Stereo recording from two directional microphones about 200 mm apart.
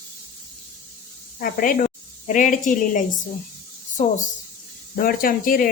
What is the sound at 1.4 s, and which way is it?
A woman's voice, 45° left (ahead or behind).